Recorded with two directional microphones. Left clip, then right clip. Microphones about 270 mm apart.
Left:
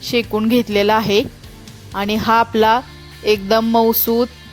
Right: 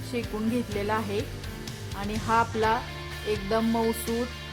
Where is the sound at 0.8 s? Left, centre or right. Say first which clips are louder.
Left 16 dB; left.